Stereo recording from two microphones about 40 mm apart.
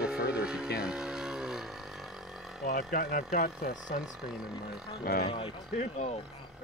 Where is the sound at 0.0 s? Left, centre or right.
Right; by 2.9 s centre.